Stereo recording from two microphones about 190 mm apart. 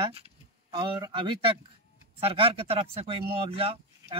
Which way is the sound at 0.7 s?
25° right (ahead or behind).